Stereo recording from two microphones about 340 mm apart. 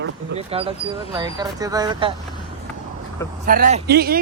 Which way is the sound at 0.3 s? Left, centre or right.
Centre.